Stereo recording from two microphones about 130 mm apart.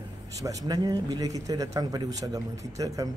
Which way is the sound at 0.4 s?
25° right (ahead or behind).